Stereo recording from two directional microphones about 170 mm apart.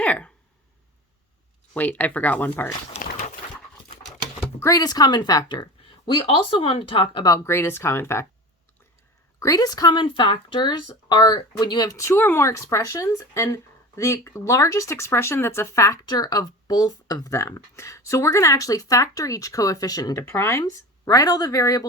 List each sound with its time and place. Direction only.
0.0 s a sound: 10° left (ahead or behind)
1.7 s speech: 10° left (ahead or behind)
2.9 s dog: 50° left (ahead or behind)
4.6 s speech: 20° left (ahead or behind)
9.4 s speech: 20° left (ahead or behind)